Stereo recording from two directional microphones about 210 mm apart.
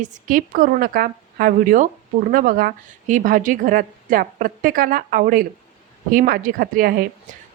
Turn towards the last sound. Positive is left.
turn(degrees=-45)  # may be behind; listen again after turning